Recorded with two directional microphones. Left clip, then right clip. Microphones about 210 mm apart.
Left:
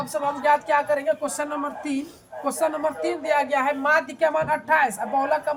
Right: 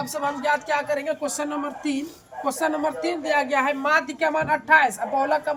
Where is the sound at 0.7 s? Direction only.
20° right (ahead or behind).